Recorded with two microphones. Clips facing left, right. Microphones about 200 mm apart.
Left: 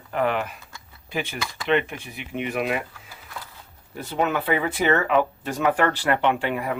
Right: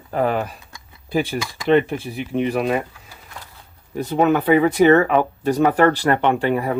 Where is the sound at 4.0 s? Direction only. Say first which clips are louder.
Right 7 dB; 45° right (ahead or behind).